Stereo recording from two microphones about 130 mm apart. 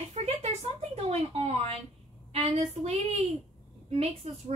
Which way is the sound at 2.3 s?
50° right (ahead or behind).